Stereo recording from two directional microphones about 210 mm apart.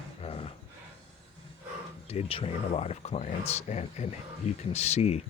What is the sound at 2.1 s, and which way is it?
Speech, 30° left (ahead or behind).